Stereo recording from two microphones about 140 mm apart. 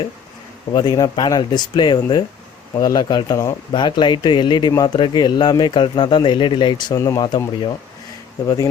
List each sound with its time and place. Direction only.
0.7 s speech: 30° left (ahead or behind)